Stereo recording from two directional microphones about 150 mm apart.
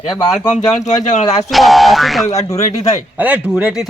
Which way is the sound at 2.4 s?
20° left (ahead or behind).